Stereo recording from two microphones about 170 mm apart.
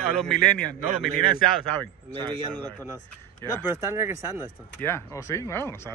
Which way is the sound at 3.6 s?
15° right (ahead or behind).